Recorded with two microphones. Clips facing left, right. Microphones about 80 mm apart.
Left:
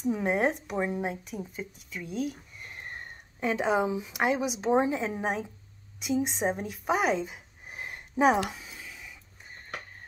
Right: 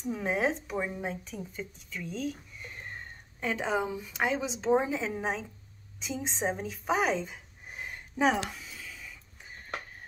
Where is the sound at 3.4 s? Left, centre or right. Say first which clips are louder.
Left 4 dB; centre.